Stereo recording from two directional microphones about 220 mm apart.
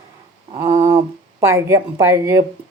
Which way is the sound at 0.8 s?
25° right (ahead or behind).